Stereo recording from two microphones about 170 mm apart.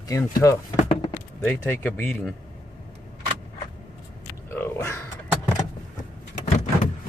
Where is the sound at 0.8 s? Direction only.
40° left (ahead or behind).